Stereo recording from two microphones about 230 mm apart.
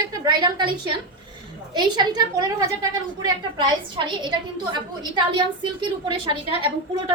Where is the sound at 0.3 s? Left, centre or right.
Centre.